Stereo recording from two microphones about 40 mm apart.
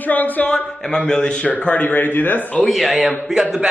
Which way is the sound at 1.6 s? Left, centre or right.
Left.